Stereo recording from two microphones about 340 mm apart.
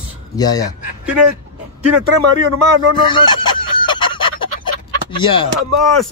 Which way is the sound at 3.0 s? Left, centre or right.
Centre.